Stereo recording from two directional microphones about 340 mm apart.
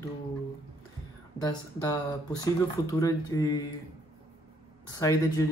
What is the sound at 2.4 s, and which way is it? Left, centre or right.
Speech, centre.